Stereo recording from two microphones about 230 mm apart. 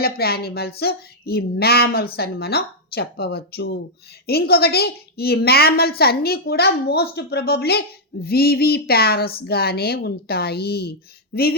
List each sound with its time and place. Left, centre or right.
0.0 s a woman's voice: left